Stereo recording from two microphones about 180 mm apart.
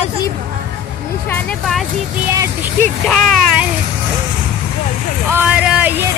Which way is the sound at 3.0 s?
Centre (ahead or behind).